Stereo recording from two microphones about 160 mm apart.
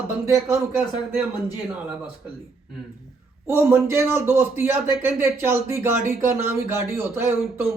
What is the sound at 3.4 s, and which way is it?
A man's voice, 15° right (ahead or behind).